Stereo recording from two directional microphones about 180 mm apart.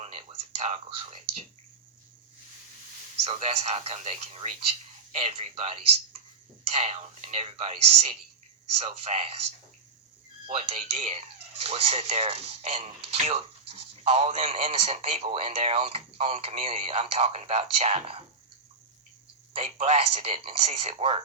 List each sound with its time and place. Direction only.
0.0 s speech: 30° right (ahead or behind)
3.2 s speech: 35° right (ahead or behind)
19.5 s speech: 35° right (ahead or behind)